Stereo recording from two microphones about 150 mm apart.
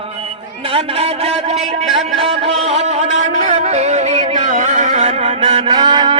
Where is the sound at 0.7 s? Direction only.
40° right (ahead or behind).